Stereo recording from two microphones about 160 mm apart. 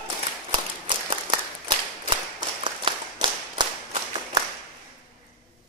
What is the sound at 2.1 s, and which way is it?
Clapping, 30° right (ahead or behind).